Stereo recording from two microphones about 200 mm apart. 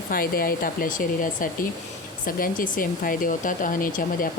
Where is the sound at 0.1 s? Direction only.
45° left (ahead or behind).